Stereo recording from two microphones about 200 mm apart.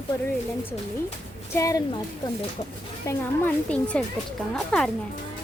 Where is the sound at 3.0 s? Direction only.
10° left (ahead or behind).